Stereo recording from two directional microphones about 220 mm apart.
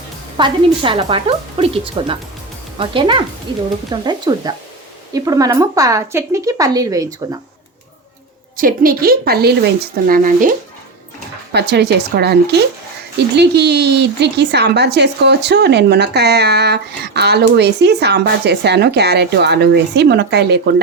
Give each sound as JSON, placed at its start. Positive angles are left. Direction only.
{"t": 0.3, "sound": "speech", "side_deg": -20}
{"t": 8.5, "sound": "speech", "side_deg": -40}
{"t": 11.5, "sound": "speech", "side_deg": -50}